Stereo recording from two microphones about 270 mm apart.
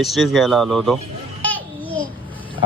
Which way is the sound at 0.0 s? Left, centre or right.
Centre.